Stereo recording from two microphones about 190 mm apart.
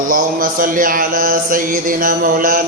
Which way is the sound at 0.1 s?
45° right (ahead or behind).